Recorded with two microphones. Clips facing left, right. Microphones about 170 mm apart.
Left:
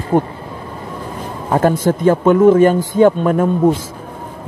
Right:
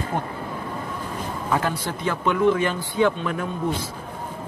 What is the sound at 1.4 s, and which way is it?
A man's voice, 45° left (ahead or behind).